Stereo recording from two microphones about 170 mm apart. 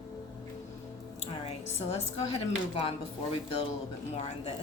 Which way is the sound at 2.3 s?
35° left (ahead or behind).